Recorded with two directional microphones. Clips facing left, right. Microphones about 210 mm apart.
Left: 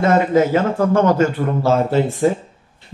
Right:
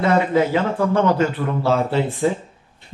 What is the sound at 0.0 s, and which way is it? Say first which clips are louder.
Speech: left 3 dB; 45° left (ahead or behind).